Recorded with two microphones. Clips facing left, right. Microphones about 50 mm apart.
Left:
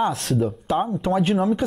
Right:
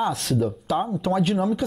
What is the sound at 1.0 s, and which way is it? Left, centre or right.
Speech, left.